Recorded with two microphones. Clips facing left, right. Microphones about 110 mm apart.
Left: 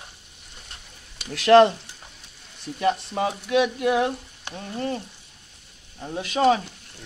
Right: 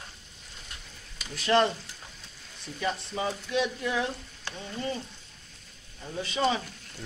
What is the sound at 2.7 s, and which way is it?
Speech, 60° left (ahead or behind).